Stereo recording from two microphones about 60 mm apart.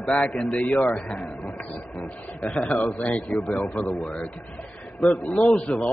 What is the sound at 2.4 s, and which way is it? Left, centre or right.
A man's voice, left.